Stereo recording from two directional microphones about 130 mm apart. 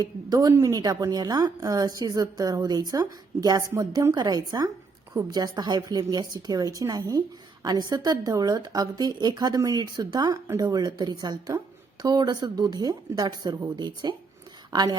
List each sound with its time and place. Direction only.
0.0 s a woman's voice: 30° right (ahead or behind)